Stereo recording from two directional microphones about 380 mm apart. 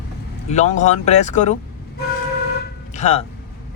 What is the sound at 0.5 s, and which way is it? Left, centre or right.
Speech, centre.